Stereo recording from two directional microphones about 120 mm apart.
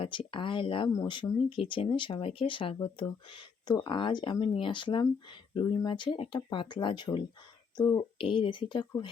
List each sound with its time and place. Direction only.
0.0 s speech: 45° left (ahead or behind)
7.8 s speech: 30° left (ahead or behind)
8.2 s speech: 45° left (ahead or behind)